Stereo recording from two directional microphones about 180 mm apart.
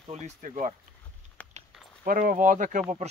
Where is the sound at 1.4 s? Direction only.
10° left (ahead or behind).